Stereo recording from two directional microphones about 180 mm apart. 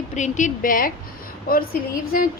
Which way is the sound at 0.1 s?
40° left (ahead or behind).